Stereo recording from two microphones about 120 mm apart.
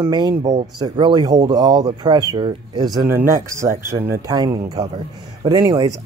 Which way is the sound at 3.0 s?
20° right (ahead or behind).